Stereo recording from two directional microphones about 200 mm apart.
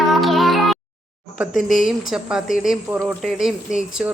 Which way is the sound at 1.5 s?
40° left (ahead or behind).